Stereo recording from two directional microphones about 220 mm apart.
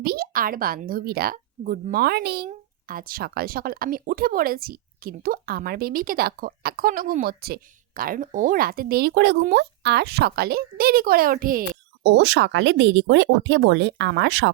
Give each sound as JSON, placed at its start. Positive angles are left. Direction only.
{"t": 0.0, "sound": "speech", "side_deg": -45}